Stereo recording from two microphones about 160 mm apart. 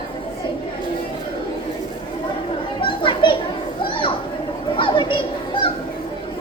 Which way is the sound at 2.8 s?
30° left (ahead or behind).